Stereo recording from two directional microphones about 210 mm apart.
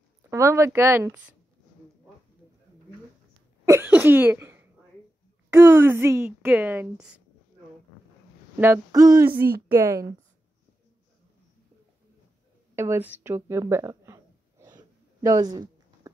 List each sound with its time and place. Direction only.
0.3 s speech: 15° right (ahead or behind)
3.6 s speech: 10° right (ahead or behind)
8.5 s speech: 10° right (ahead or behind)
12.7 s a sound: 10° right (ahead or behind)